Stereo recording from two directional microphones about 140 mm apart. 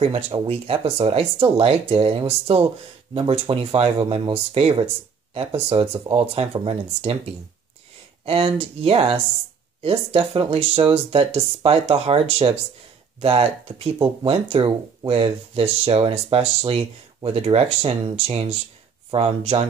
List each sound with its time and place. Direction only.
0.5 s speech: 45° right (ahead or behind)
8.3 s speech: 40° right (ahead or behind)